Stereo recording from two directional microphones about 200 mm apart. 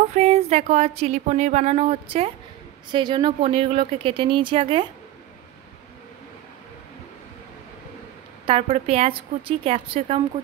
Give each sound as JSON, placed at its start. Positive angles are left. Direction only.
{"t": 0.1, "sound": "speech", "side_deg": -30}
{"t": 8.5, "sound": "speech", "side_deg": -30}